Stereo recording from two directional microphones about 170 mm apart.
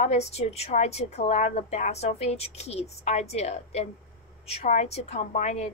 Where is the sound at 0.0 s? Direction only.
40° left (ahead or behind).